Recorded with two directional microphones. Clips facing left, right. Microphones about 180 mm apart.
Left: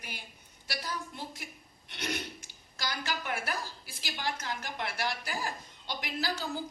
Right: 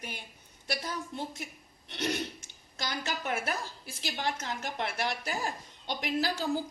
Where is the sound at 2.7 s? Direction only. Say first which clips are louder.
Right 1 dB; 25° right (ahead or behind).